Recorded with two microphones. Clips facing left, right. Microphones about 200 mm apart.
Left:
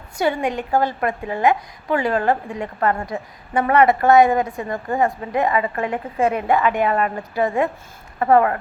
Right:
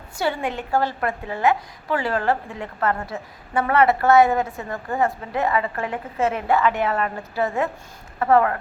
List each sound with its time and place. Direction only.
0.2 s a woman's voice: 15° left (ahead or behind)